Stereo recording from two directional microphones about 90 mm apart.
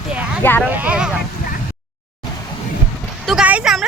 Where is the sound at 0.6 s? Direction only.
20° right (ahead or behind).